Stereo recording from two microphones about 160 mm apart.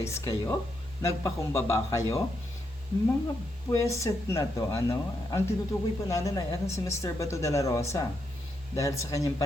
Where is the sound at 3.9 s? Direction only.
20° left (ahead or behind).